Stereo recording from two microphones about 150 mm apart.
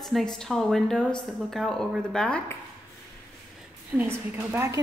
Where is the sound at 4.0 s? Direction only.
15° right (ahead or behind).